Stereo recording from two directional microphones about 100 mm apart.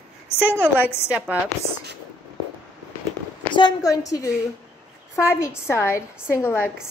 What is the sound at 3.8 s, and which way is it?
A woman's voice, 35° left (ahead or behind).